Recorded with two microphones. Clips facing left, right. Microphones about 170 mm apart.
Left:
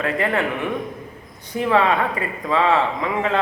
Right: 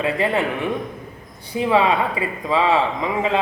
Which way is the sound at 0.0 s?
15° right (ahead or behind).